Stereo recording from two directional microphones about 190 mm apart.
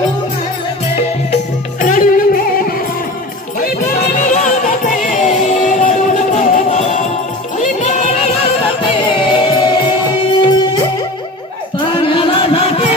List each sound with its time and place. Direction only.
1.8 s music: 45° left (ahead or behind)
3.6 s music: 45° left (ahead or behind); by 10.9 s 20° left (ahead or behind)
11.9 s music: 25° left (ahead or behind)